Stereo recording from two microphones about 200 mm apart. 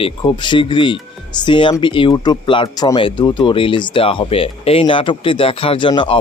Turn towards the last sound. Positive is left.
turn(degrees=25)  # may be behind; listen again after turning